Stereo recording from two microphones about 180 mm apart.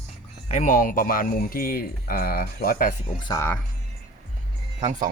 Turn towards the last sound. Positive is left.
turn(degrees=-40)  # may be behind; listen again after turning